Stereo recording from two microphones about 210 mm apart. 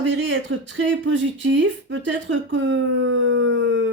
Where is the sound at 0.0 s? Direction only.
65° right (ahead or behind).